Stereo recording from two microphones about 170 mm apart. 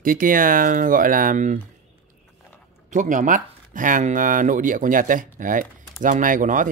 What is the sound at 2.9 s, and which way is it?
Speech, 50° right (ahead or behind).